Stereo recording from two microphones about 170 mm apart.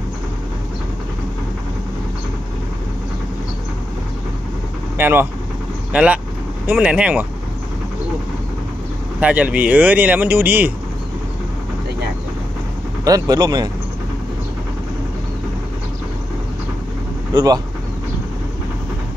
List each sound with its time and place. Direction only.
4.9 s speech: 10° right (ahead or behind)
9.2 s speech: 10° right (ahead or behind)
13.0 s speech: 20° right (ahead or behind)
17.3 s speech: 25° right (ahead or behind)